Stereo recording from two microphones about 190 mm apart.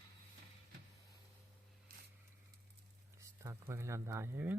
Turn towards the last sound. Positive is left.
turn(degrees=-10)  # may be behind; listen again after turning